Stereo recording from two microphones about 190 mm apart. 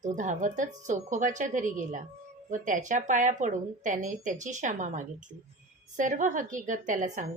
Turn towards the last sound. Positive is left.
turn(degrees=-40)  # may be behind; listen again after turning